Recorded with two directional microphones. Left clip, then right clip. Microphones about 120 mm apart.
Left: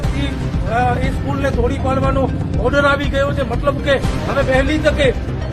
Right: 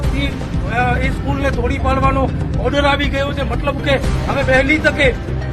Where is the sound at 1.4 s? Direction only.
20° left (ahead or behind).